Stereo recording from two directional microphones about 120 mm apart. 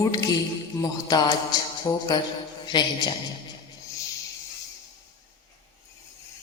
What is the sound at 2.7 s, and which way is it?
Speech, 40° left (ahead or behind).